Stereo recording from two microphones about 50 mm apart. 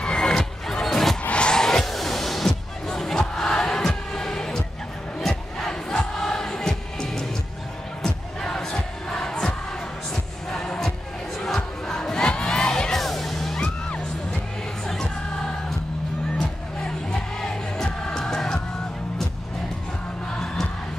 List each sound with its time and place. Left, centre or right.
0.0 s music: centre
5.2 s crowd: centre
10.5 s music: centre
13.6 s music: left
16.3 s music: centre